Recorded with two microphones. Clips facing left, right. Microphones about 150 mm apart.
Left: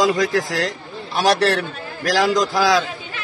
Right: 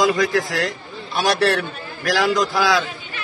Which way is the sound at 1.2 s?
40° left (ahead or behind).